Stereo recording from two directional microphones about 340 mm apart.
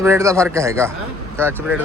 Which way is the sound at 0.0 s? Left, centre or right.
Centre.